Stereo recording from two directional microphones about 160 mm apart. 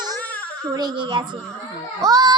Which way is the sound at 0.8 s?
30° right (ahead or behind).